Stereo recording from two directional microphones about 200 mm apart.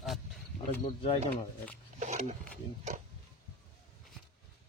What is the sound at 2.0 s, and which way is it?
Speech, 35° right (ahead or behind).